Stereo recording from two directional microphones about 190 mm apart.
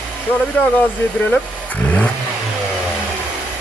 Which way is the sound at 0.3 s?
10° left (ahead or behind).